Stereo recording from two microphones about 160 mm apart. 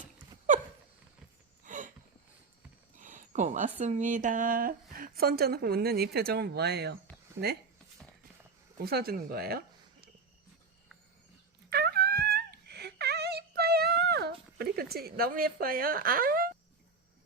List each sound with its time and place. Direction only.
1.6 s a sound: 55° right (ahead or behind)
2.9 s speech: 55° right (ahead or behind); by 6.9 s 90° right
8.8 s speech: 75° right (ahead or behind)
11.7 s wail: 75° right (ahead or behind)